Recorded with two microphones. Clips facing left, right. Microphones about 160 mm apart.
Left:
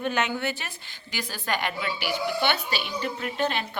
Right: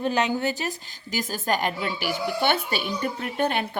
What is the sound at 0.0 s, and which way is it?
A woman's voice, 35° right (ahead or behind).